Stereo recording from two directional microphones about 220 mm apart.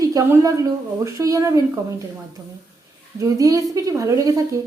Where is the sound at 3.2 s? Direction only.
15° right (ahead or behind).